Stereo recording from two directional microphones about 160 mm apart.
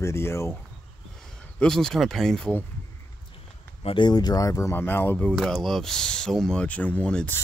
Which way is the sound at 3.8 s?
30° left (ahead or behind).